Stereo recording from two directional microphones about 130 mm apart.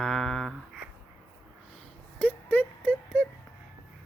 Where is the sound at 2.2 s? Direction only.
15° left (ahead or behind).